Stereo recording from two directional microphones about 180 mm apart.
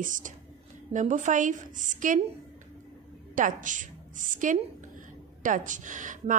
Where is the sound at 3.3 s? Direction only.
45° right (ahead or behind).